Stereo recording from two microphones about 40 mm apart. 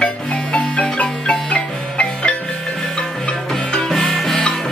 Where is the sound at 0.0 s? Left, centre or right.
Left.